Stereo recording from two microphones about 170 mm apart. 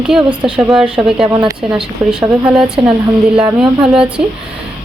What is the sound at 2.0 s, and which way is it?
A woman's voice, 5° right (ahead or behind).